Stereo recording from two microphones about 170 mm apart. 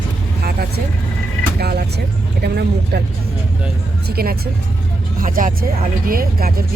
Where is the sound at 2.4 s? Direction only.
70° right (ahead or behind).